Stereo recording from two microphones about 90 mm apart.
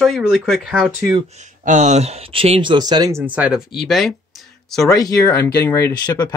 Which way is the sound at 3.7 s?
Centre (ahead or behind).